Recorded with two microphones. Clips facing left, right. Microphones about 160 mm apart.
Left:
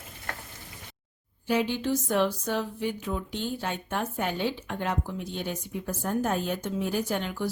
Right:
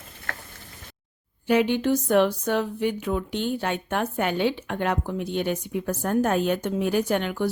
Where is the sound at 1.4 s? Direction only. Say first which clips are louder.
Right 6 dB; 65° right (ahead or behind).